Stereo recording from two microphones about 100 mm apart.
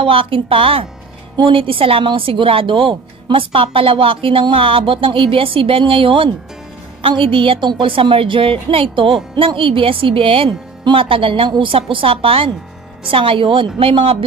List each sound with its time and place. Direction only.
0.0 s a woman's voice: 65° right (ahead or behind)